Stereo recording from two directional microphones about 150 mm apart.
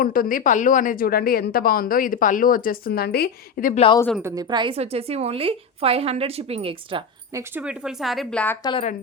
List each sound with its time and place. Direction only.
0.0 s a woman's voice: 75° left (ahead or behind)
4.2 s a woman's voice: 20° right (ahead or behind); by 7.0 s 40° right (ahead or behind)
7.3 s speech: 10° right (ahead or behind); by 8.5 s 5° left (ahead or behind)